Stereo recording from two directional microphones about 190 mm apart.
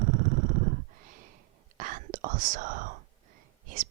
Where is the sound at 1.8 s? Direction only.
45° right (ahead or behind).